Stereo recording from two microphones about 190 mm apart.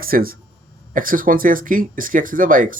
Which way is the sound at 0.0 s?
50° right (ahead or behind).